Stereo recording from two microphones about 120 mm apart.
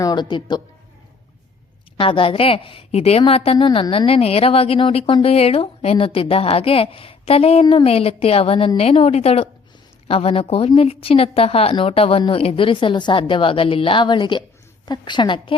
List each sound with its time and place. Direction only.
0.0 s a woman's voice: 35° left (ahead or behind)
2.0 s a woman's voice: 45° left (ahead or behind)